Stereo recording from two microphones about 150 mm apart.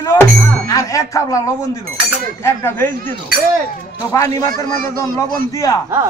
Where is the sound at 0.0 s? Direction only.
20° left (ahead or behind).